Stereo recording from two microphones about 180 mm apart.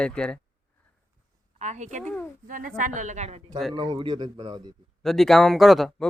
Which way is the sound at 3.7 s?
25° right (ahead or behind).